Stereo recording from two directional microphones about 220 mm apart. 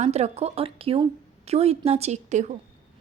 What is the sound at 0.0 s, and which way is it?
A woman's voice, 30° right (ahead or behind).